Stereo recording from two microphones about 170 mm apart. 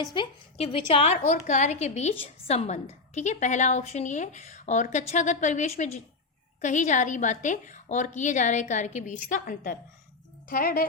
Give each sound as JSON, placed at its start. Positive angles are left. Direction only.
{"t": 0.0, "sound": "a woman's voice", "side_deg": 30}